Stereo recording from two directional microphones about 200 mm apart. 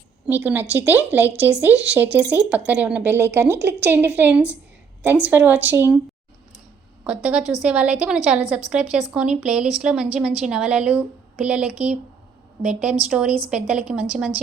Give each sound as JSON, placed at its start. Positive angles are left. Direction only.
{"t": 0.3, "sound": "speech", "side_deg": -10}
{"t": 7.0, "sound": "a woman's voice", "side_deg": -5}